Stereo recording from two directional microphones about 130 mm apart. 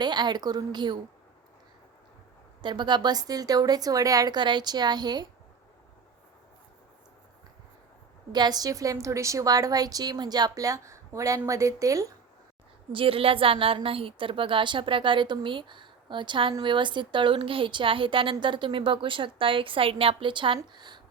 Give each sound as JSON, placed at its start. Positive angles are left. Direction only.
{"t": 0.0, "sound": "a woman's voice", "side_deg": -35}
{"t": 2.6, "sound": "a woman's voice", "side_deg": -35}
{"t": 8.3, "sound": "a woman's voice", "side_deg": -30}
{"t": 12.9, "sound": "a woman's voice", "side_deg": -45}